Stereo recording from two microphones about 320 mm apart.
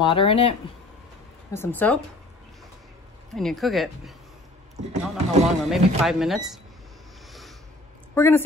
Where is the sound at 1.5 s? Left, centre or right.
Centre.